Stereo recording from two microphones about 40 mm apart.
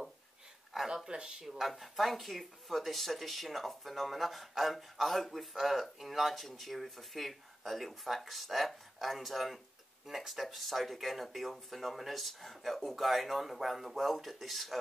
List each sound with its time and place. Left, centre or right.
1.0 s speech: centre
1.6 s speech: centre